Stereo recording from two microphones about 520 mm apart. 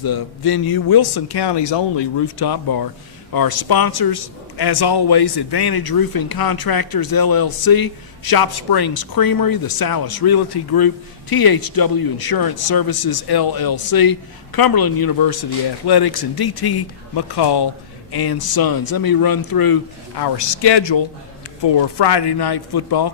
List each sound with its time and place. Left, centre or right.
0.0 s a man's voice: left